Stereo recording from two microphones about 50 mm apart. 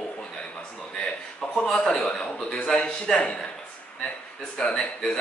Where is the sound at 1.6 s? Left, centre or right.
Centre.